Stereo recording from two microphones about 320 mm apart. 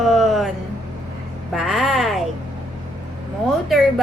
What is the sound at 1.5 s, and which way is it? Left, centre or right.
Music, centre.